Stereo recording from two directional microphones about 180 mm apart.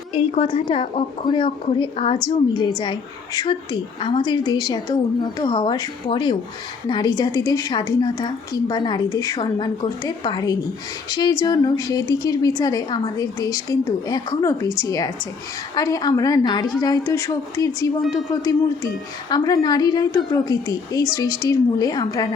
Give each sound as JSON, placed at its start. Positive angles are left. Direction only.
{"t": 0.1, "sound": "a woman's voice", "side_deg": 35}
{"t": 19.3, "sound": "a woman's voice", "side_deg": 20}